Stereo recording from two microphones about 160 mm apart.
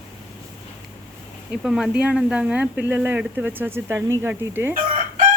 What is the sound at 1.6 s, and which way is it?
Speech, 5° right (ahead or behind).